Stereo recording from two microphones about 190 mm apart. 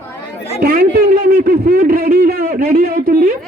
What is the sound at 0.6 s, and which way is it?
A man's voice, 50° right (ahead or behind).